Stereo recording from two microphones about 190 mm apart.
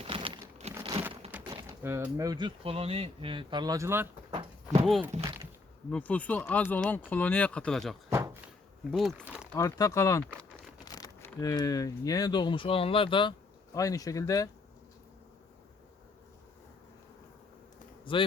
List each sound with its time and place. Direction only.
0.0 s crumpling: 30° right (ahead or behind)
1.5 s speech: 15° right (ahead or behind)
4.3 s a sound: 30° right (ahead or behind)
4.8 s speech: centre (ahead or behind)
8.1 s door: 15° right (ahead or behind)
8.9 s speech: centre (ahead or behind)
9.5 s speech: 15° left (ahead or behind)
10.8 s a sound: 20° left (ahead or behind)
11.3 s speech: 20° left (ahead or behind)
18.0 s speech: 25° left (ahead or behind)